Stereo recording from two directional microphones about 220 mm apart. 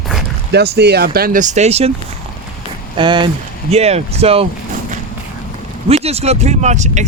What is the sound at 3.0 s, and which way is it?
Speech, 20° right (ahead or behind).